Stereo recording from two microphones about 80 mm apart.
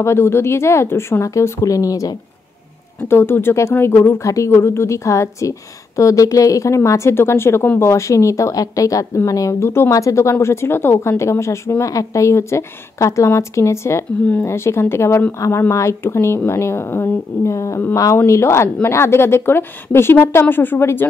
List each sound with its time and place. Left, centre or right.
0.0 s speech: left
3.0 s speech: left
7.8 s speech: left